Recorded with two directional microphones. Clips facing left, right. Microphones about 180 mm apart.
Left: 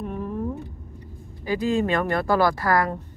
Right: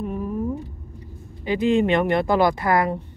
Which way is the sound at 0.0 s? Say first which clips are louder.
Right 3 dB; 10° right (ahead or behind).